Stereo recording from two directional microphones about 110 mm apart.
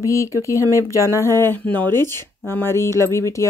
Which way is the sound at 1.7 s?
20° left (ahead or behind).